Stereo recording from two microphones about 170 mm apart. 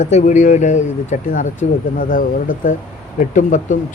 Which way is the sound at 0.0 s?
45° left (ahead or behind).